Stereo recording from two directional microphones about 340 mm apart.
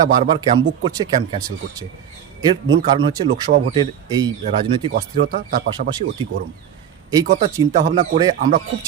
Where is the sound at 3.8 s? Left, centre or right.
Centre.